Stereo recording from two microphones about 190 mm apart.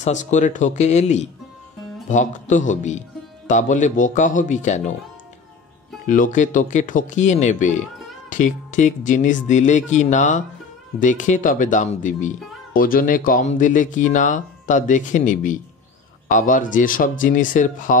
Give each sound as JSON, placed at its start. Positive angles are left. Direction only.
{"t": 0.0, "sound": "speech", "side_deg": 40}
{"t": 6.0, "sound": "speech", "side_deg": 45}